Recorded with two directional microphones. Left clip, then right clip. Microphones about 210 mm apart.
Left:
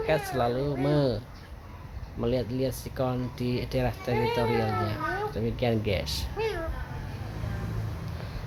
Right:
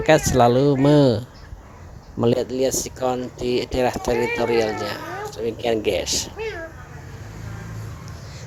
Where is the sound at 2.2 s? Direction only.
35° right (ahead or behind).